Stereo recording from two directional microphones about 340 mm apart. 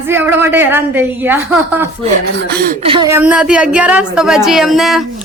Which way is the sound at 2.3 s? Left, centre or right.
Right.